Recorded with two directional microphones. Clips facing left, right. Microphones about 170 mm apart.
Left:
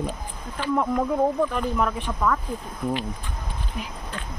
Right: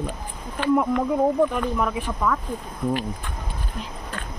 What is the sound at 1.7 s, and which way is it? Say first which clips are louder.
Speech: even; centre (ahead or behind).